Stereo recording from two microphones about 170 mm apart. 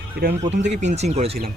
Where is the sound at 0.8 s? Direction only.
40° right (ahead or behind).